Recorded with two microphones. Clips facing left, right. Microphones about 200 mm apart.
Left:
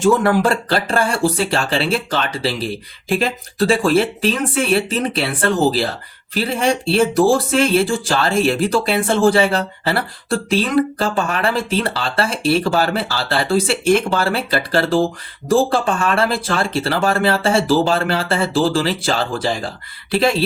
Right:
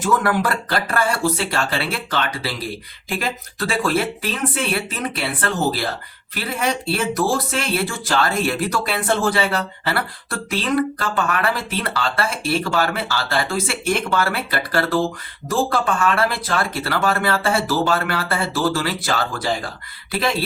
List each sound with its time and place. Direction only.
0.0 s speech: 25° left (ahead or behind)